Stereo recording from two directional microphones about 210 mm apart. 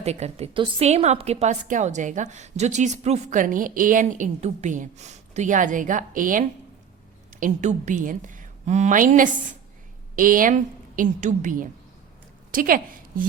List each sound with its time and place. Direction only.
0.0 s a woman's voice: 30° right (ahead or behind)